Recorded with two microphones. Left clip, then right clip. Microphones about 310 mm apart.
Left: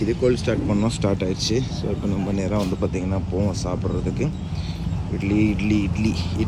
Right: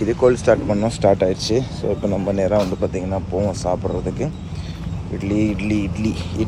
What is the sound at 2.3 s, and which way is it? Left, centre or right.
Speech, centre.